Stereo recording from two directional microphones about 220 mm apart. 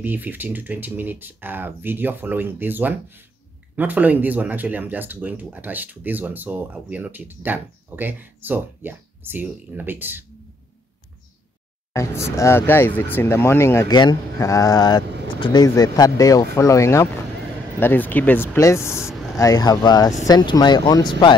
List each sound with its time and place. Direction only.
0.0 s speech: 10° right (ahead or behind)
11.9 s speech: 10° left (ahead or behind)